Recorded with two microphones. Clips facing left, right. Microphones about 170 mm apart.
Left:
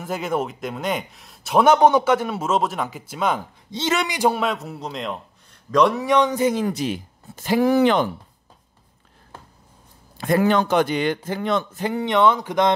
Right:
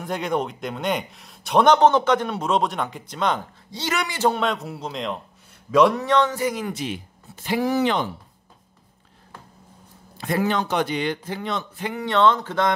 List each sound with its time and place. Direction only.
0.0 s speech: 5° left (ahead or behind)
3.7 s a man's voice: 25° left (ahead or behind)
4.2 s speech: 5° left (ahead or behind)
5.9 s speech: 10° left (ahead or behind); by 8.1 s 55° left (ahead or behind)
10.1 s a man's voice: 50° left (ahead or behind)
12.0 s speech: 15° left (ahead or behind)